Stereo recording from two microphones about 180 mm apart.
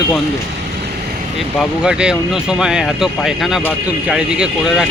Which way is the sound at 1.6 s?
5° right (ahead or behind).